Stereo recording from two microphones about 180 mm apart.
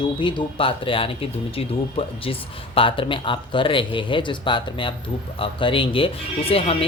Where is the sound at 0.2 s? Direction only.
25° left (ahead or behind).